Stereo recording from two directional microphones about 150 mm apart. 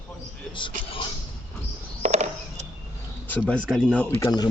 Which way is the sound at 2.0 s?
50° right (ahead or behind).